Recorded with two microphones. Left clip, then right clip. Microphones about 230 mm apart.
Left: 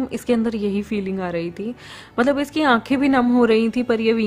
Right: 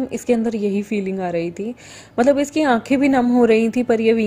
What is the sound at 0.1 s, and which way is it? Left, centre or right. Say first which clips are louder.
A woman's voice: right 3 dB; centre.